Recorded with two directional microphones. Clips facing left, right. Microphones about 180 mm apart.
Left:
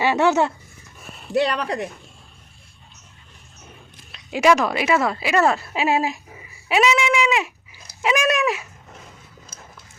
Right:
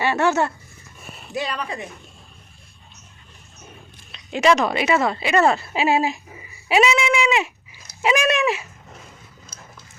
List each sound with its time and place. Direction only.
0.0 s speech: 15° left (ahead or behind)
1.3 s speech: 70° left (ahead or behind)
4.1 s speech: 5° left (ahead or behind)
9.5 s a sound: 50° left (ahead or behind)